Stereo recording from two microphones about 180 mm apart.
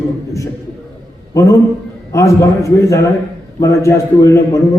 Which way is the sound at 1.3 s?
20° left (ahead or behind).